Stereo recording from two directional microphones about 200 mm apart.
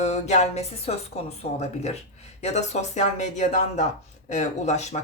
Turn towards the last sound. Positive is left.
turn(degrees=35)  # may be behind; listen again after turning